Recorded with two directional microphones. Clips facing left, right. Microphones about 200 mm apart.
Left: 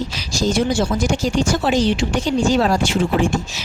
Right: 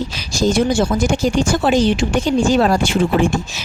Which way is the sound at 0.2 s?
55° right (ahead or behind).